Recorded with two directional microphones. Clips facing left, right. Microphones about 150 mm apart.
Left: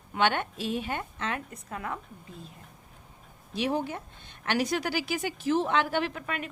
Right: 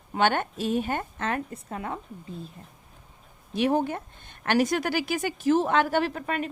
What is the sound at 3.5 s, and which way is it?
A woman's voice, 50° right (ahead or behind).